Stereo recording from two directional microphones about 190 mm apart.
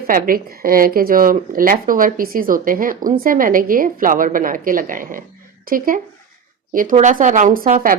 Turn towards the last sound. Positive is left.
turn(degrees=-50)  # may be behind; listen again after turning